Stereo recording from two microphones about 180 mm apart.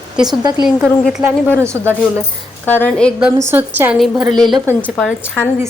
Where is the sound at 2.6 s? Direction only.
10° left (ahead or behind).